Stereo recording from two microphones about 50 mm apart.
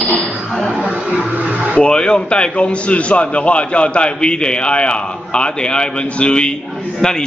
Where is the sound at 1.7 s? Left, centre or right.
Centre.